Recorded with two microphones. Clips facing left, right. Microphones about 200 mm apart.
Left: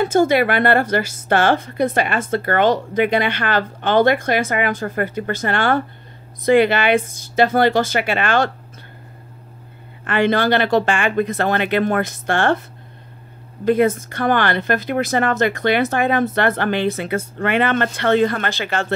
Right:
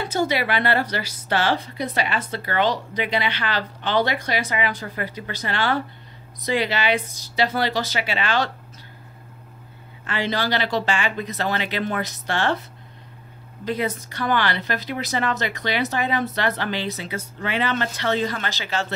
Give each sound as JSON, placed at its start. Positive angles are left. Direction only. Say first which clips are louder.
{"t": 0.0, "sound": "a woman's voice", "louder": "left 8 dB", "side_deg": 50}
{"t": 10.0, "sound": "a woman's voice", "louder": "left 8 dB", "side_deg": 55}
{"t": 13.7, "sound": "a woman's voice", "louder": "left 10 dB", "side_deg": 50}